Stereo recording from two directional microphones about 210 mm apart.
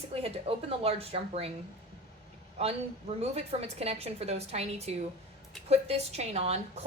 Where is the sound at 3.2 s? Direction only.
30° right (ahead or behind).